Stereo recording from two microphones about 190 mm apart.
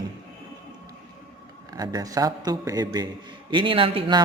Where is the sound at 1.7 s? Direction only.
20° right (ahead or behind).